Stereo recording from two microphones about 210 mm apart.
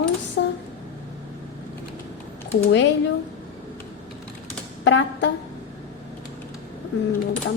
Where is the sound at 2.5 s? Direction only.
60° left (ahead or behind).